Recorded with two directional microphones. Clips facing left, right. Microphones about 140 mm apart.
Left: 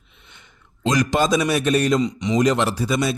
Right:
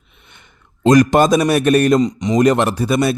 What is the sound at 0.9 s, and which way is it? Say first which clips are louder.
A man's voice: right 8 dB; 55° right (ahead or behind).